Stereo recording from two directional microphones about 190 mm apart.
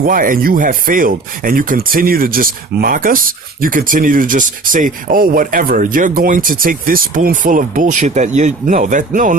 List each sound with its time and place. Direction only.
0.0 s speech: 45° right (ahead or behind)